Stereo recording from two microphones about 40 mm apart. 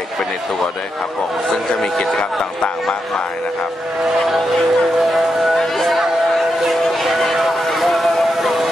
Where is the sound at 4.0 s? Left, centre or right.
Centre.